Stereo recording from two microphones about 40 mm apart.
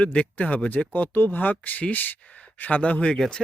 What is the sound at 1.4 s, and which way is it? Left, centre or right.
Speech, left.